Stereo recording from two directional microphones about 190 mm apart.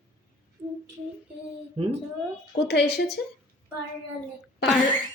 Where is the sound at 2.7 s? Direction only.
60° left (ahead or behind).